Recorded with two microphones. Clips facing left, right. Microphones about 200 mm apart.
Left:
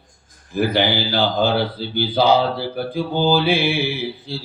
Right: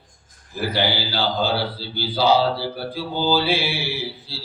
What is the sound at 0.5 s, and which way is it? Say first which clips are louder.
Speech: left 5 dB; 50° left (ahead or behind).